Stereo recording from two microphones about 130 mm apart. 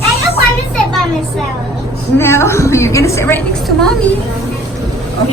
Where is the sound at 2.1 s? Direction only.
20° left (ahead or behind).